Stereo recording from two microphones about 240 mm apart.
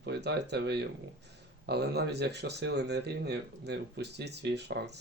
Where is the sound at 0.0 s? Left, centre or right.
Right.